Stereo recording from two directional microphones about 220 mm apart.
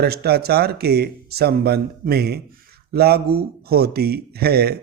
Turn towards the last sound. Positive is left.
turn(degrees=-45)  # may be behind; listen again after turning